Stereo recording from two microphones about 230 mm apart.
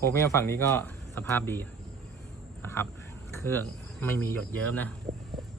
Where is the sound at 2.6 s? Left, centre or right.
Centre.